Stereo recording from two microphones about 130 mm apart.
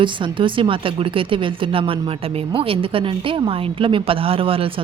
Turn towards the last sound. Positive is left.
turn(degrees=-45)  # may be behind; listen again after turning